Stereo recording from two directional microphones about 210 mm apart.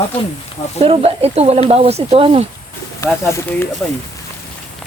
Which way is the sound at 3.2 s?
10° left (ahead or behind).